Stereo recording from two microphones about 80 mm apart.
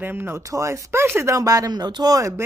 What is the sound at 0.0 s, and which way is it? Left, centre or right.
Speech, right.